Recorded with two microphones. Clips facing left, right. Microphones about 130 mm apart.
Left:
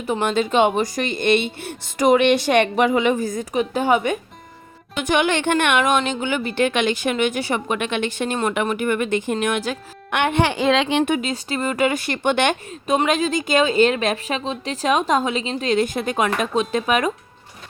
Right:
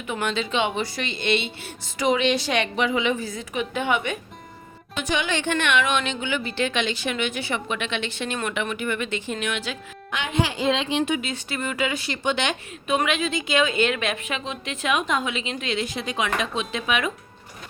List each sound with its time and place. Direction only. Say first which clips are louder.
0.0 s speech: left 6 dB; 40° left (ahead or behind)
5.0 s speech: left 6 dB; 55° left (ahead or behind)
10.1 s a woman's voice: left 6 dB; 60° left (ahead or behind)
11.2 s speech: left 5 dB; 40° left (ahead or behind); by 12.5 s 55° left (ahead or behind)
12.9 s a woman's voice: left 4 dB; 40° left (ahead or behind)